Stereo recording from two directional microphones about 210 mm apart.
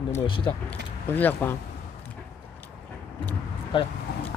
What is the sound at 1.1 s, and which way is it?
Speech, 10° left (ahead or behind).